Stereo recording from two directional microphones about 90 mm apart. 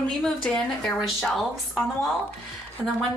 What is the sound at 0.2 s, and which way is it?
A woman's voice, 10° left (ahead or behind).